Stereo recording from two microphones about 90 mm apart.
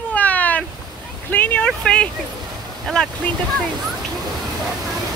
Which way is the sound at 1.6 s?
10° left (ahead or behind).